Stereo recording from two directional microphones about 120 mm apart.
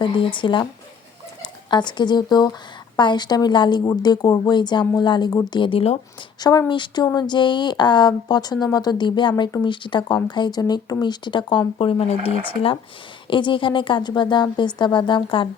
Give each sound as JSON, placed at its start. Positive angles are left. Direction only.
{"t": 0.0, "sound": "a woman's voice", "side_deg": 40}
{"t": 6.4, "sound": "a woman's voice", "side_deg": 35}
{"t": 11.8, "sound": "speech", "side_deg": 55}
{"t": 13.2, "sound": "a woman's voice", "side_deg": 45}